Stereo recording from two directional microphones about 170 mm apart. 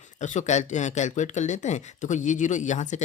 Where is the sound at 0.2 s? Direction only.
45° left (ahead or behind).